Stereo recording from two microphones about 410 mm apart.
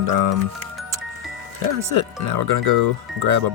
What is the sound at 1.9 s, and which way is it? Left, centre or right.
Speech, right.